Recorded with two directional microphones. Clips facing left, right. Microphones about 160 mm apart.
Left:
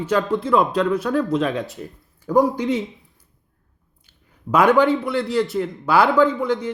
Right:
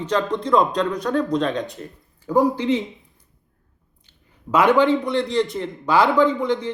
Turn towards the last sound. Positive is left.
turn(degrees=10)  # may be behind; listen again after turning